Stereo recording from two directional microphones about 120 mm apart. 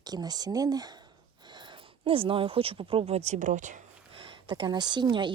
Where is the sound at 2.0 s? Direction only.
50° right (ahead or behind); by 3.7 s 90° right.